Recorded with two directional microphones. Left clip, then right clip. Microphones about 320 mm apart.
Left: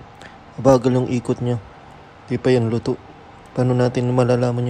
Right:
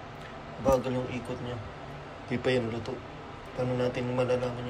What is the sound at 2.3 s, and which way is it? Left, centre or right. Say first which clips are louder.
Speech: left 10 dB; centre.